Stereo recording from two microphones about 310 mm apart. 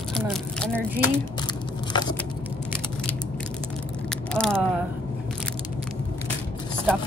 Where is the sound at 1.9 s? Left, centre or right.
Centre.